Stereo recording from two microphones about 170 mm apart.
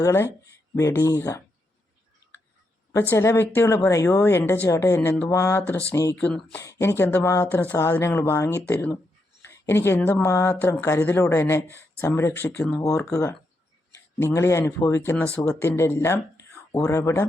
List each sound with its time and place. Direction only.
0.0 s speech: 15° left (ahead or behind)
3.1 s speech: 15° left (ahead or behind)
6.1 s speech: 5° left (ahead or behind)
6.6 s speech: 15° left (ahead or behind)